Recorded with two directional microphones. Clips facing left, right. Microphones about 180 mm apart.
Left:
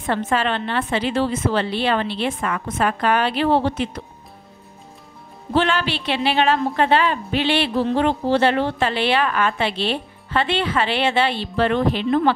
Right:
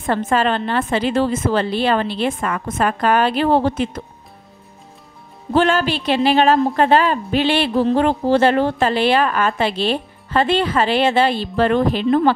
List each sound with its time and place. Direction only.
0.0 s a woman's voice: 45° right (ahead or behind)
5.5 s a woman's voice: 45° right (ahead or behind)